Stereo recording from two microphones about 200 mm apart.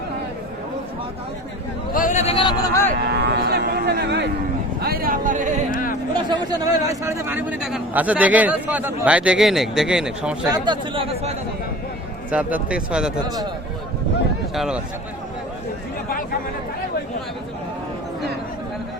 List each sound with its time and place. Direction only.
1.9 s a man's voice: 40° left (ahead or behind); by 2.9 s 15° left (ahead or behind)
3.1 s a sound: 55° right (ahead or behind)
4.8 s speech: 50° right (ahead or behind)
6.1 s a man's voice: 20° right (ahead or behind); by 10.5 s 5° right (ahead or behind)
10.5 s speech: 25° right (ahead or behind)
12.3 s speech: 5° right (ahead or behind)
13.2 s speech: 20° right (ahead or behind)
14.5 s speech: centre (ahead or behind)